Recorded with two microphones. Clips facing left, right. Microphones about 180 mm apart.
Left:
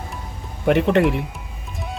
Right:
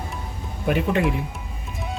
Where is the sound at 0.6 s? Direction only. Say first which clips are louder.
Left 5 dB; 70° left (ahead or behind).